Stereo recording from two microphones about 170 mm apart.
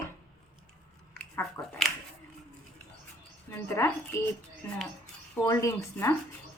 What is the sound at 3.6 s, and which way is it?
Speech, 15° left (ahead or behind).